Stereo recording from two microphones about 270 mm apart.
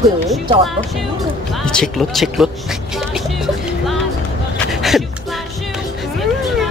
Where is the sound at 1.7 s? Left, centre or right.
Centre.